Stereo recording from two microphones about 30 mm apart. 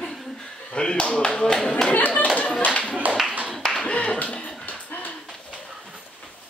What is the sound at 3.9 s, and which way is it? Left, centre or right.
Clapping, left.